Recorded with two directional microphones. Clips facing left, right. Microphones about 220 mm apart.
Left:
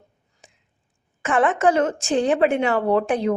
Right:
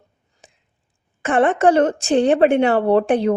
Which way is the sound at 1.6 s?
35° right (ahead or behind).